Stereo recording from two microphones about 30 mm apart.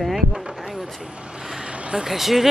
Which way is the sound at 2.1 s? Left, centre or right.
Centre.